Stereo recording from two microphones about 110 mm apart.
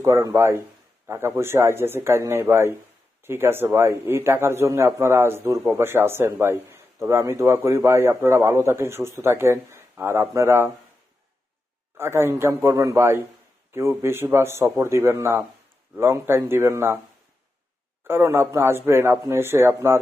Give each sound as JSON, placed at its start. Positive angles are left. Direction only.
{"t": 0.0, "sound": "a man's voice", "side_deg": -30}
{"t": 11.9, "sound": "a man's voice", "side_deg": -20}
{"t": 18.1, "sound": "a man's voice", "side_deg": -25}